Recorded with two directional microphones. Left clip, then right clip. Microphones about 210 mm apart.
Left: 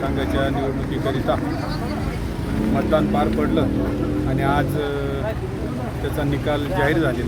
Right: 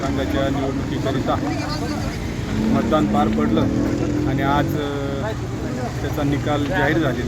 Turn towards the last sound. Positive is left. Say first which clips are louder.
# right 1 dB
turn(degrees=0)  # may be behind; listen again after turning